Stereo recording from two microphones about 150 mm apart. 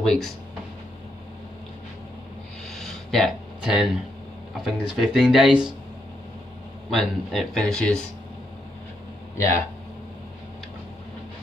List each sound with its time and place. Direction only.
0.0 s speech: 5° left (ahead or behind)
2.7 s a sound: centre (ahead or behind)
4.6 s speech: centre (ahead or behind)
6.9 s speech: centre (ahead or behind)